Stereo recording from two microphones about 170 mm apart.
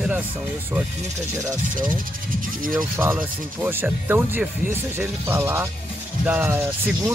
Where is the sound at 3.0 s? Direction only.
10° right (ahead or behind).